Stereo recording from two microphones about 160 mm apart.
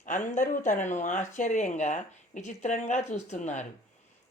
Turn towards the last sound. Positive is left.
turn(degrees=45)  # may be behind; listen again after turning